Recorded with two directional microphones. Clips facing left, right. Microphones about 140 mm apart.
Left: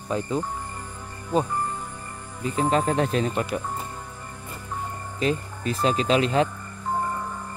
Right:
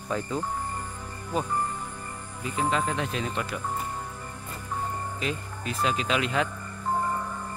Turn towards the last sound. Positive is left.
turn(degrees=35)  # may be behind; listen again after turning